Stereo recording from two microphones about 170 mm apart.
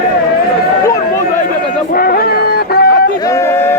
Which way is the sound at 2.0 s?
60° left (ahead or behind).